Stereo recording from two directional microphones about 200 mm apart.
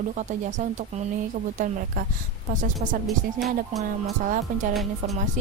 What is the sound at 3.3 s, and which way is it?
Speech, centre (ahead or behind).